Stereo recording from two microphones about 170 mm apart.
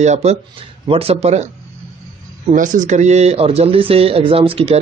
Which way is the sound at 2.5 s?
50° right (ahead or behind).